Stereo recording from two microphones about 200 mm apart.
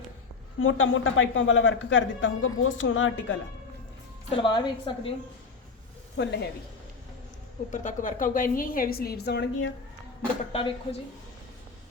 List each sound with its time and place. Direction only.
0.6 s a man's voice: 85° left
4.4 s a woman's voice: 20° left (ahead or behind)
6.1 s speech: 55° left (ahead or behind)
7.7 s a woman's voice: 40° left (ahead or behind); by 9.7 s 60° left (ahead or behind)
10.5 s a woman's voice: 30° left (ahead or behind)